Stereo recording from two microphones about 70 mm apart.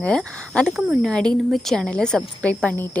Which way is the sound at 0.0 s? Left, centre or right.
Centre.